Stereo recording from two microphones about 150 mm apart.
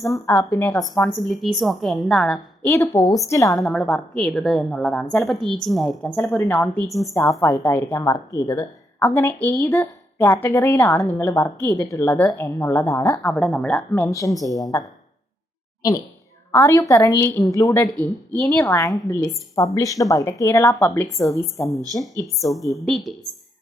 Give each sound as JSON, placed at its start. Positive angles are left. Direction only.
{"t": 0.1, "sound": "a woman's voice", "side_deg": 15}
{"t": 1.2, "sound": "a woman's voice", "side_deg": 0}
{"t": 2.6, "sound": "a woman's voice", "side_deg": 20}
{"t": 3.6, "sound": "a woman's voice", "side_deg": 5}
{"t": 6.8, "sound": "a woman's voice", "side_deg": 0}
{"t": 7.1, "sound": "a woman's voice", "side_deg": 20}
{"t": 13.3, "sound": "a woman's voice", "side_deg": 5}
{"t": 17.9, "sound": "speech", "side_deg": -25}
{"t": 18.5, "sound": "a woman's voice", "side_deg": 15}
{"t": 22.9, "sound": "a woman's voice", "side_deg": 0}